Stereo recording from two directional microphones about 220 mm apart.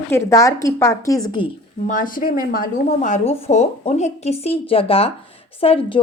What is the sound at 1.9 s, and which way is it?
Speech, 40° left (ahead or behind).